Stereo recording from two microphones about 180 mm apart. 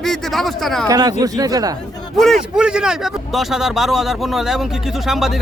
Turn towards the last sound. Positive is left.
turn(degrees=0)  # may be behind; listen again after turning